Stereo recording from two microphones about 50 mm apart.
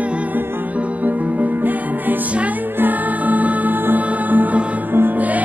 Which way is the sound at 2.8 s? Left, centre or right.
Right.